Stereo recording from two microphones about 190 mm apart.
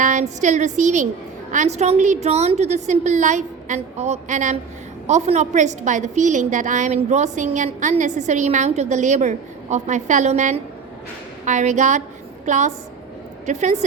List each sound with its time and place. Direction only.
0.0 s a woman's voice: 40° right (ahead or behind)